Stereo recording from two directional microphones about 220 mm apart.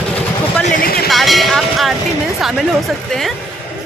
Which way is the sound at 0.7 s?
45° left (ahead or behind).